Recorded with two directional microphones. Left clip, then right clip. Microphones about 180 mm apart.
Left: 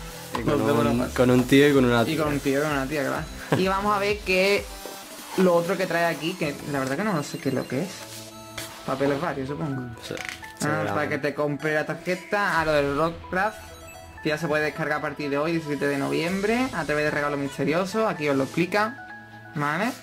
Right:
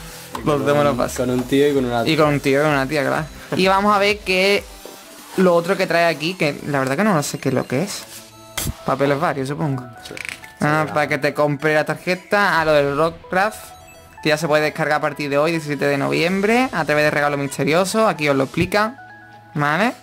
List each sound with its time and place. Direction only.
0.5 s speech: 45° right (ahead or behind)
1.1 s speech: 30° left (ahead or behind)
2.0 s speech: 55° right (ahead or behind)
2.6 s speech: 40° right (ahead or behind)
5.4 s speech: 35° right (ahead or behind)
10.6 s speech: 40° right (ahead or behind)